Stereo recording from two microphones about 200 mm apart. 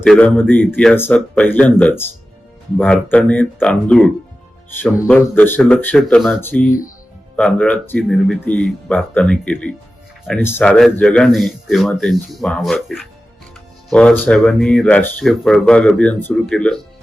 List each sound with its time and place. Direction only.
0.0 s speech: 5° left (ahead or behind)
6.7 s speech: 40° left (ahead or behind)
7.3 s speech: 5° left (ahead or behind)